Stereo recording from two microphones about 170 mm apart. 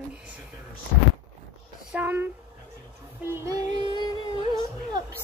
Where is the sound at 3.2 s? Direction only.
15° right (ahead or behind).